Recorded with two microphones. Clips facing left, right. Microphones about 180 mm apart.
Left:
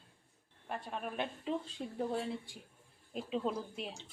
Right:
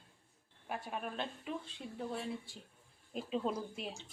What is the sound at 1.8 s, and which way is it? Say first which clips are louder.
Speech: left 4 dB; 50° left (ahead or behind).